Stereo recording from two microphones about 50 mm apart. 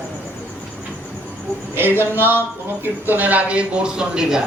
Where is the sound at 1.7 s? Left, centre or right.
Right; by 4.4 s centre.